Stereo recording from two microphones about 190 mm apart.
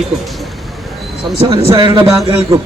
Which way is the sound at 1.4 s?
30° right (ahead or behind).